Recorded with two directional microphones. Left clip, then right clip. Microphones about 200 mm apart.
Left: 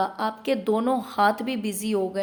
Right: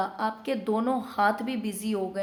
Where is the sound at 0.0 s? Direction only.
30° left (ahead or behind).